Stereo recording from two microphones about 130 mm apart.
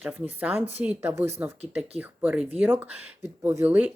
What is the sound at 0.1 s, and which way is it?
Speech, 15° right (ahead or behind).